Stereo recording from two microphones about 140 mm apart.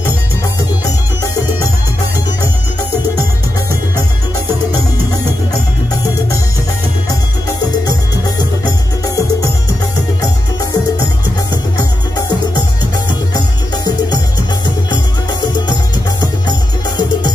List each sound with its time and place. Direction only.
9.0 s music: 25° left (ahead or behind)